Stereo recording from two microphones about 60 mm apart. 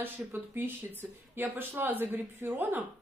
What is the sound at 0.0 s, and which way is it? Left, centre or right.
Speech, right.